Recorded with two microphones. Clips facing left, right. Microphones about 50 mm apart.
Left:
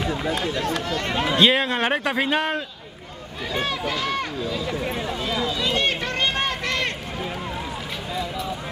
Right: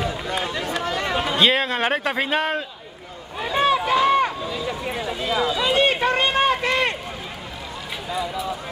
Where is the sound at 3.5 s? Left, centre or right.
Centre.